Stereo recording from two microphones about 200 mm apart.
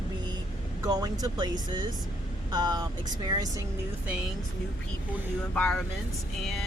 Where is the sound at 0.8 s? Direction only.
20° right (ahead or behind).